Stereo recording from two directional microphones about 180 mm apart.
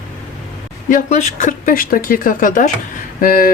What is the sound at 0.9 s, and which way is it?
Speech, 45° left (ahead or behind).